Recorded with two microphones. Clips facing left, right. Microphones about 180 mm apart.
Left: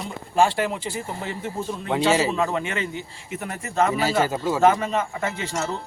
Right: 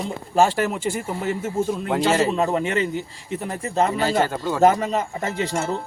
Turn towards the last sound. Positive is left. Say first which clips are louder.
# right 3 dB
turn(degrees=-50)  # may be behind; listen again after turning